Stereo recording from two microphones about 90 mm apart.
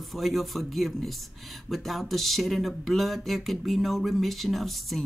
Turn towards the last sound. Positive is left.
turn(degrees=0)  # may be behind; listen again after turning